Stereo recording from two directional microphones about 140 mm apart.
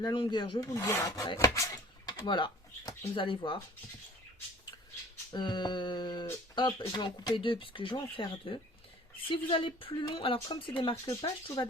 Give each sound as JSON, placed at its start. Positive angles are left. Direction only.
{"t": 0.0, "sound": "speech", "side_deg": 35}
{"t": 0.6, "sound": "filing", "side_deg": 20}
{"t": 1.4, "sound": "speech", "side_deg": 25}
{"t": 5.3, "sound": "speech", "side_deg": 30}
{"t": 11.0, "sound": "filing", "side_deg": 25}